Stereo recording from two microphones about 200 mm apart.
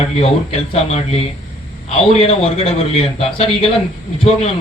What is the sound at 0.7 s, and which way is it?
Speech, 30° left (ahead or behind).